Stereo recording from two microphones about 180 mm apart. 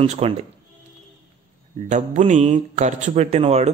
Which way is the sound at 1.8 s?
40° right (ahead or behind).